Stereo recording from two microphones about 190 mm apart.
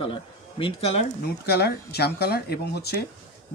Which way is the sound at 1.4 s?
55° left (ahead or behind).